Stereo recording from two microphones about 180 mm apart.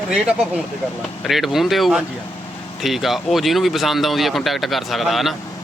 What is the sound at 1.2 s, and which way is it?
Speech, centre (ahead or behind).